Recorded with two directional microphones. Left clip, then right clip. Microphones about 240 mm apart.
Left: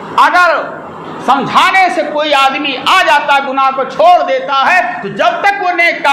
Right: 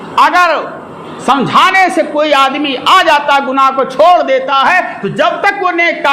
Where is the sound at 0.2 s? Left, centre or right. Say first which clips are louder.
Even; right.